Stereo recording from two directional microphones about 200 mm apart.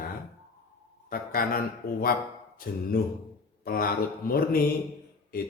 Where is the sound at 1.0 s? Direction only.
45° left (ahead or behind).